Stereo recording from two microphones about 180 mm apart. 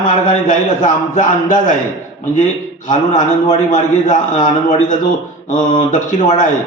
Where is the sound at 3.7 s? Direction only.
45° left (ahead or behind).